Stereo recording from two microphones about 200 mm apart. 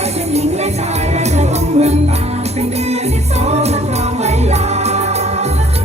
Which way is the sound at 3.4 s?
35° right (ahead or behind).